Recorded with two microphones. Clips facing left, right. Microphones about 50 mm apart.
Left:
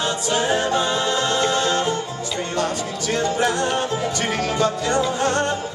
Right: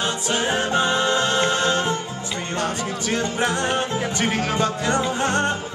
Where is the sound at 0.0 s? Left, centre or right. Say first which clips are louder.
Left 1 dB; right.